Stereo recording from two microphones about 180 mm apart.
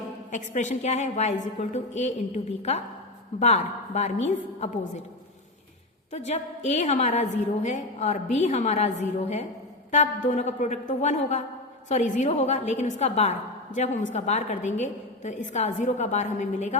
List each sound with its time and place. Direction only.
0.3 s a woman's voice: 45° left (ahead or behind)
6.1 s a woman's voice: 40° left (ahead or behind)